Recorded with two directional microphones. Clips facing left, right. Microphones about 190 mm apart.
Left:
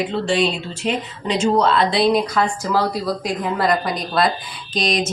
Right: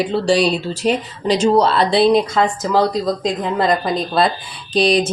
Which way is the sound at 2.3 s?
20° right (ahead or behind).